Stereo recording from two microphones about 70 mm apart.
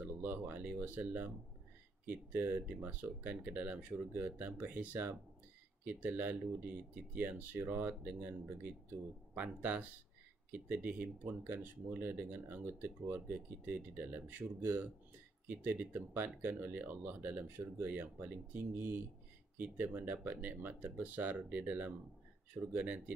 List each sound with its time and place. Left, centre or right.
0.0 s speech: right
15.5 s speech: right